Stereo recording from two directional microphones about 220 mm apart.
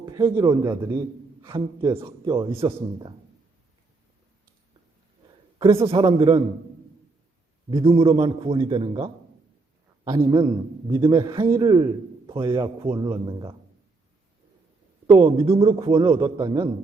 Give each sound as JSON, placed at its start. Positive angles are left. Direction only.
{"t": 0.0, "sound": "a man's voice", "side_deg": -15}
{"t": 5.5, "sound": "a man's voice", "side_deg": -25}
{"t": 7.7, "sound": "a man's voice", "side_deg": -25}
{"t": 15.4, "sound": "a man's voice", "side_deg": -25}